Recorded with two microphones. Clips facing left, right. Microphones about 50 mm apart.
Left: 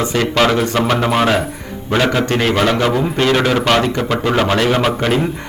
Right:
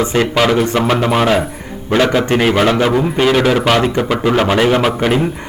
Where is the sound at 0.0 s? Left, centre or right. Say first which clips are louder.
Right 3 dB; right.